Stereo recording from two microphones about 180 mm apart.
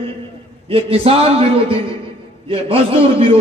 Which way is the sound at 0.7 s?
30° right (ahead or behind).